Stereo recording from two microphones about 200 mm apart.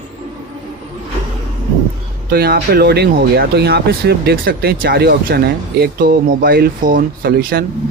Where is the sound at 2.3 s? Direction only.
50° right (ahead or behind).